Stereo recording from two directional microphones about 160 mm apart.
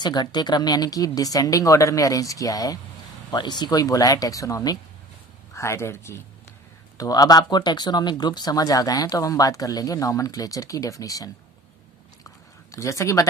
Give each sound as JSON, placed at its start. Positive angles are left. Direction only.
{"t": 0.0, "sound": "speech", "side_deg": 25}
{"t": 12.7, "sound": "speech", "side_deg": 20}